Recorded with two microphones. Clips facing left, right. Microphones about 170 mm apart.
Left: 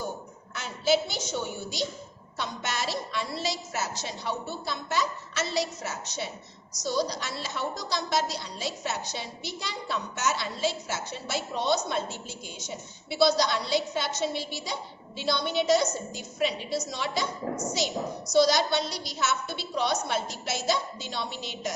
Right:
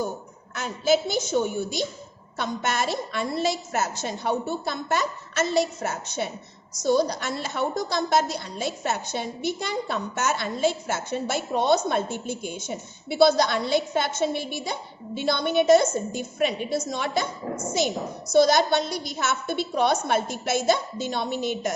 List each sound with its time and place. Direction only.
0.5 s a woman's voice: 50° right (ahead or behind)